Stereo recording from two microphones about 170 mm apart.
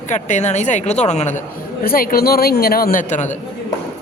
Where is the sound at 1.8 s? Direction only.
60° left (ahead or behind).